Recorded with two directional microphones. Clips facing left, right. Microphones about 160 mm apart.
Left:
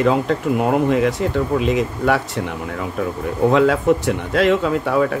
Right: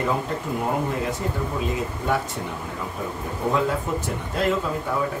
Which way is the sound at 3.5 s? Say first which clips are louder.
Left 9 dB; 80° left.